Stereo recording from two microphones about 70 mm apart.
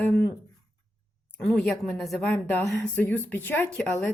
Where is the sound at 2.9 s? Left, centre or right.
Left.